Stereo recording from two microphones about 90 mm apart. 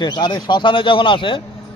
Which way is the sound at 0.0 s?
55° left (ahead or behind).